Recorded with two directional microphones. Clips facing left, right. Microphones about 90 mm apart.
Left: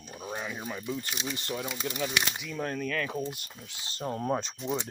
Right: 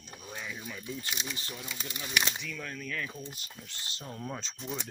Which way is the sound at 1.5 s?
60° left (ahead or behind).